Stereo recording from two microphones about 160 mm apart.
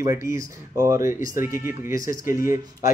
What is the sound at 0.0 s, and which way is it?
Speech, 20° right (ahead or behind).